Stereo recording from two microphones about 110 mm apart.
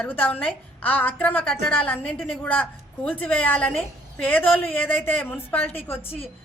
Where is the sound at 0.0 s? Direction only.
10° left (ahead or behind).